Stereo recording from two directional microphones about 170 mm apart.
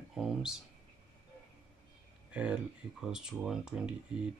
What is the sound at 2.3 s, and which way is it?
Speech, 5° right (ahead or behind).